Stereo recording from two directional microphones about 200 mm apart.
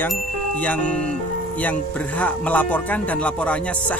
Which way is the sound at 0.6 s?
5° left (ahead or behind).